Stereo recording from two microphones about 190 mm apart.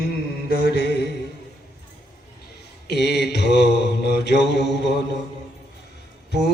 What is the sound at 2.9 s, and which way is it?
Mantra, 60° left (ahead or behind).